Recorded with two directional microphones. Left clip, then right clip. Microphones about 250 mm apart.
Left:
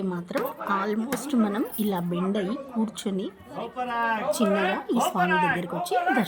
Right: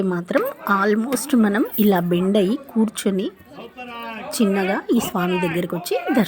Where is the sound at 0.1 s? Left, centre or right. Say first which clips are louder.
Right 8 dB; centre.